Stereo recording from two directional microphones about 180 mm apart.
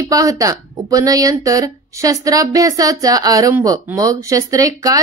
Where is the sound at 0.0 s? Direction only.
20° right (ahead or behind).